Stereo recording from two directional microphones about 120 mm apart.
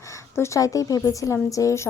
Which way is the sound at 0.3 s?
25° left (ahead or behind).